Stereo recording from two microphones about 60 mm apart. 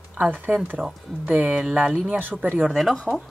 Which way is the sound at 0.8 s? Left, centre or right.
Centre.